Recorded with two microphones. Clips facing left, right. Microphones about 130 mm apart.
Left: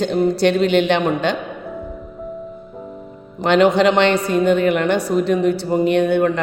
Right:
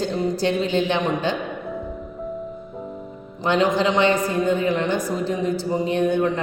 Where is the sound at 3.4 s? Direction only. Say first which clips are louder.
Left 6 dB; 70° left (ahead or behind).